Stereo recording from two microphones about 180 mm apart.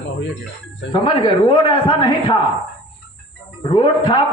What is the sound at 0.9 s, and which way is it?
A man's voice, 25° left (ahead or behind).